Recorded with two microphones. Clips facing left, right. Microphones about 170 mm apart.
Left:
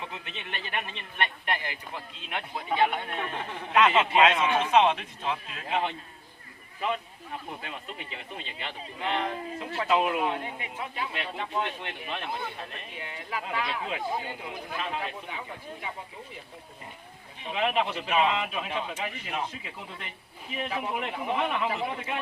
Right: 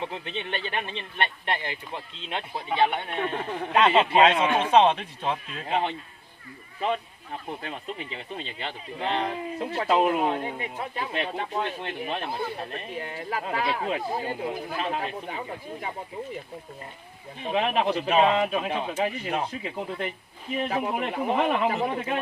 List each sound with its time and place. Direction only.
0.0 s speech: 30° right (ahead or behind)
7.6 s speech: 35° right (ahead or behind)
17.4 s a man's voice: 40° right (ahead or behind)